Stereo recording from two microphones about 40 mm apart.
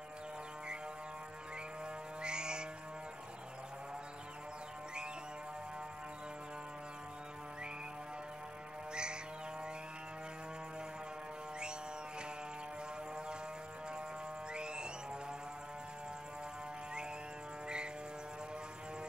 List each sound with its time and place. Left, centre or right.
2.2 s music: right
8.9 s music: right
14.5 s music: right